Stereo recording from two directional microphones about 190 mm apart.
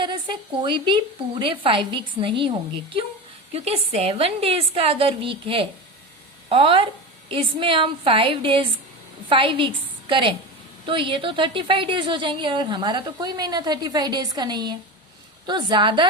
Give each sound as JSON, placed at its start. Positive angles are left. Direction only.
{"t": 0.0, "sound": "a woman's voice", "side_deg": -25}
{"t": 3.5, "sound": "a woman's voice", "side_deg": -35}